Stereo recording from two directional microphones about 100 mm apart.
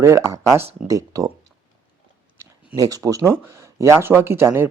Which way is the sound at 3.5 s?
30° right (ahead or behind).